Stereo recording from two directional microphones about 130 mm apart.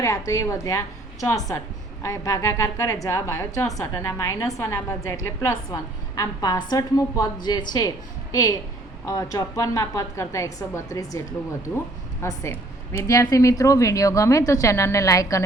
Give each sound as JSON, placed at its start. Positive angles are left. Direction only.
{"t": 0.0, "sound": "a woman's voice", "side_deg": 25}
{"t": 12.2, "sound": "a woman's voice", "side_deg": 20}